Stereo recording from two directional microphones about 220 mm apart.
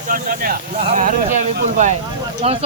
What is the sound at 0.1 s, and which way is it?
Speech, 40° right (ahead or behind).